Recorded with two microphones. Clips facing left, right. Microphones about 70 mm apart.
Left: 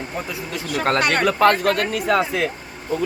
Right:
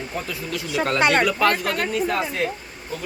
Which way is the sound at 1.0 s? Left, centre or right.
Right.